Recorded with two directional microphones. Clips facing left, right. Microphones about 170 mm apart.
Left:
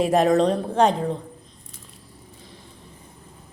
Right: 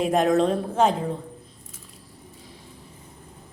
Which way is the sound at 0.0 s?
Centre (ahead or behind).